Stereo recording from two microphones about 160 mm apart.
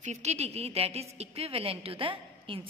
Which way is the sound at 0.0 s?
45° right (ahead or behind).